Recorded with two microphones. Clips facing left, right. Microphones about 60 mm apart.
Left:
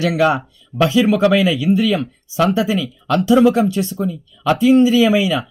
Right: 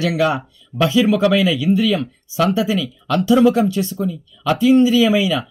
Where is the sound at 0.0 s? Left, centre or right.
Left.